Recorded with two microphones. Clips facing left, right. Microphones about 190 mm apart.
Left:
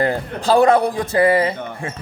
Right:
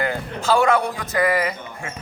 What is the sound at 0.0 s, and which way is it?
A man's voice, 35° left (ahead or behind).